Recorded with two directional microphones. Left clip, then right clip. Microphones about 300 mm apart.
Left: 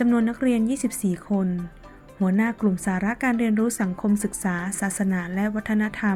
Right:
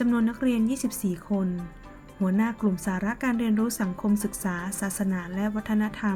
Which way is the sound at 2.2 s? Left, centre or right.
Centre.